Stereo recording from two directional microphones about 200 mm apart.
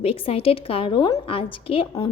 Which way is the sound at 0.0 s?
30° left (ahead or behind).